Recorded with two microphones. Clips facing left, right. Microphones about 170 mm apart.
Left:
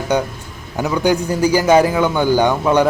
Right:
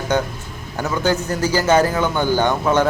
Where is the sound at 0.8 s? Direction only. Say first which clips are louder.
Left 3 dB; 15° left (ahead or behind).